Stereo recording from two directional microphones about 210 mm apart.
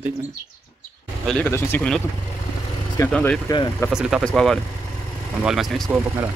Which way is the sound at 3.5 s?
20° left (ahead or behind).